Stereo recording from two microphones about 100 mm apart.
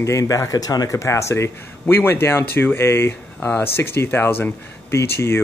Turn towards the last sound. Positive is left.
turn(degrees=25)  # may be behind; listen again after turning